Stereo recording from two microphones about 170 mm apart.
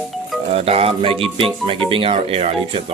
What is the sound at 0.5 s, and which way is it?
Speech, 35° right (ahead or behind).